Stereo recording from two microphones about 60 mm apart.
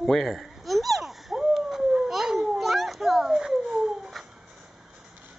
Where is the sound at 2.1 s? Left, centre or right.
Centre.